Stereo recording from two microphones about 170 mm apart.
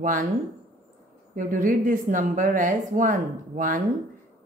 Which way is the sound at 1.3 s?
50° right (ahead or behind).